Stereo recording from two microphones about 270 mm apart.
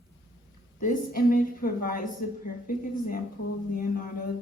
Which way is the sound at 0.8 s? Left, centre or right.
Left.